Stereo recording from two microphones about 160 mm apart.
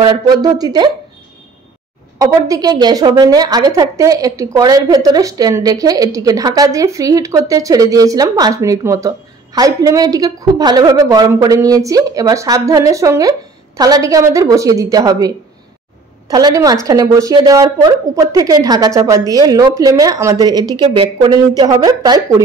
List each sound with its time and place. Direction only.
0.0 s speech: 25° right (ahead or behind)
2.1 s speech: 20° right (ahead or behind)